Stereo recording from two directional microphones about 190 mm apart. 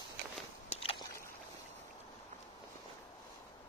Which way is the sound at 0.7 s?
30° left (ahead or behind).